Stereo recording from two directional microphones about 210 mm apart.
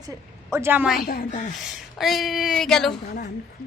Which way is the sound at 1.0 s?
45° left (ahead or behind).